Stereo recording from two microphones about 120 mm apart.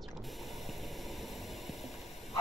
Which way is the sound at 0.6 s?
Centre (ahead or behind).